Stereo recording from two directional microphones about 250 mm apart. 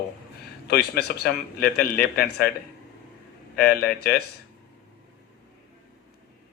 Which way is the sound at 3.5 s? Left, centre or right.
Left.